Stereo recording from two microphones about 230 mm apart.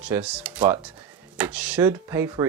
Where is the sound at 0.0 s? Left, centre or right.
Centre.